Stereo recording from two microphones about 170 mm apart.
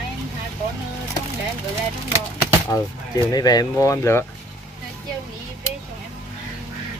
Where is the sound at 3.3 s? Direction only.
20° left (ahead or behind).